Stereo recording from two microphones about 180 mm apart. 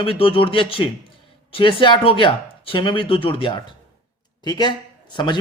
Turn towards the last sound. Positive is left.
turn(degrees=25)  # may be behind; listen again after turning